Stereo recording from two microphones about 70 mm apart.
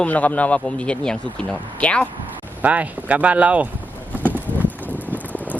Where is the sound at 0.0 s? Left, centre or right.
Left.